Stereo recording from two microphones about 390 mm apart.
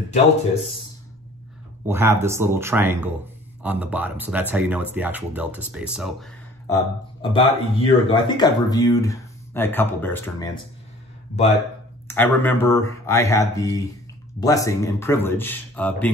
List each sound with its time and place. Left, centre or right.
1.9 s speech: centre
7.2 s speech: centre
12.1 s speech: centre